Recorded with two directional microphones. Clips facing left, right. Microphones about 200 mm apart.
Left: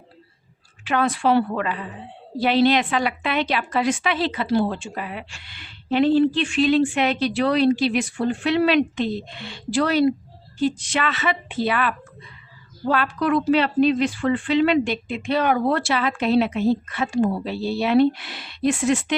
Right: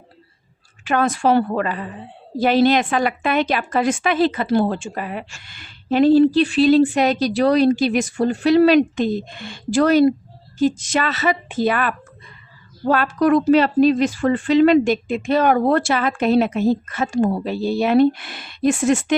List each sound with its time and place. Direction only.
0.9 s a woman's voice: 45° right (ahead or behind)